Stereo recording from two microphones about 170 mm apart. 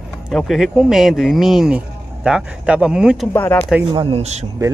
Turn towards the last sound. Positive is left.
turn(degrees=-40)  # may be behind; listen again after turning